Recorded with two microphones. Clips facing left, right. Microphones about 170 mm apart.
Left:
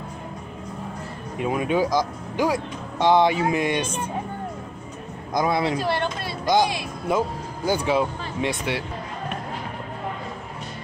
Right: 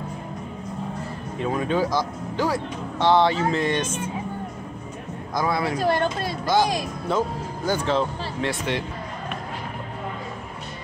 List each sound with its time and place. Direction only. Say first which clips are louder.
1.4 s speech: left 1 dB; 15° left (ahead or behind)
5.3 s a man's voice: left 2 dB; 20° left (ahead or behind)
5.8 s speech: right 3 dB; 45° right (ahead or behind)
6.4 s speech: left 1 dB; 15° left (ahead or behind)